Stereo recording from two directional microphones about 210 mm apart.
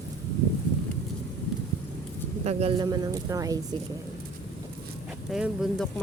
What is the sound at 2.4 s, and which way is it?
Speech, 30° right (ahead or behind).